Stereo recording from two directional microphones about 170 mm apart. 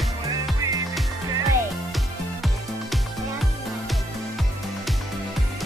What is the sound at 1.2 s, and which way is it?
Music, 20° right (ahead or behind).